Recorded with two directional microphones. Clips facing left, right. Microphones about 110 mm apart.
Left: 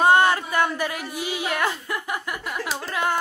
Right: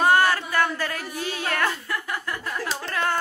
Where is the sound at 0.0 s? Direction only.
20° left (ahead or behind).